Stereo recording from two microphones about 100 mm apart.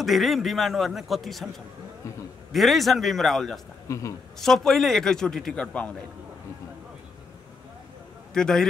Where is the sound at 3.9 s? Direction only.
30° left (ahead or behind).